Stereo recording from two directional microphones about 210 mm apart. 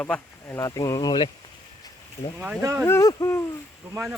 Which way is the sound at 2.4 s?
10° right (ahead or behind).